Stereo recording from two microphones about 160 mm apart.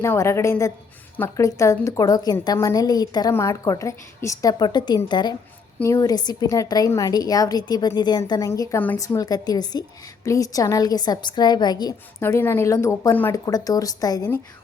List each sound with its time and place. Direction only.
0.0 s a woman's voice: 15° left (ahead or behind)
12.2 s a woman's voice: 15° left (ahead or behind)